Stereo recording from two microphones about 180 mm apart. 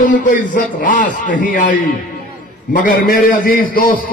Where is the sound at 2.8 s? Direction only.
55° left (ahead or behind).